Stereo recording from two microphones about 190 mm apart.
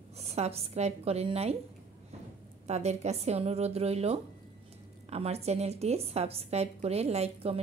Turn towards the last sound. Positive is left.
turn(degrees=-35)  # may be behind; listen again after turning